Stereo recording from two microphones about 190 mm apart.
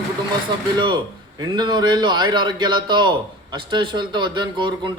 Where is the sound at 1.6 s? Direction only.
25° right (ahead or behind).